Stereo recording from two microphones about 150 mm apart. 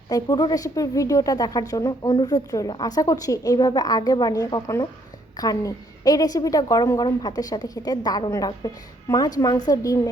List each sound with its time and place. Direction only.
0.1 s a woman's voice: 25° left (ahead or behind)